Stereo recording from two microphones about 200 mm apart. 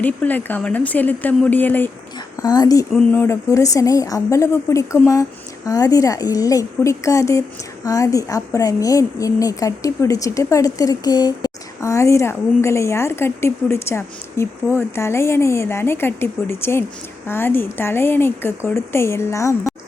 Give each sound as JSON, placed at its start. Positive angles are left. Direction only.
{"t": 0.0, "sound": "a woman's voice", "side_deg": 10}